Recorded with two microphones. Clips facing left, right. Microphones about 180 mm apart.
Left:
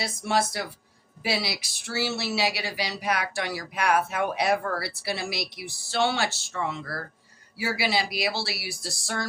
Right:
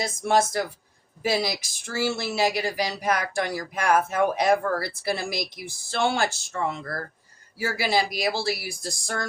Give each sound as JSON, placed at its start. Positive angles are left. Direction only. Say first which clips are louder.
{"t": 0.0, "sound": "speech", "louder": "right 4 dB", "side_deg": -45}